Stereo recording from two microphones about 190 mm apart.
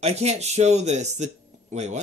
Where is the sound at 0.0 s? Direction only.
35° right (ahead or behind).